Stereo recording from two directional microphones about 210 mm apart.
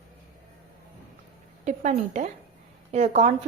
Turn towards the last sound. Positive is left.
turn(degrees=-30)  # may be behind; listen again after turning